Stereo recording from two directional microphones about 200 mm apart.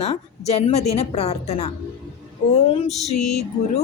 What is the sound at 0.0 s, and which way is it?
A woman's voice, 30° left (ahead or behind).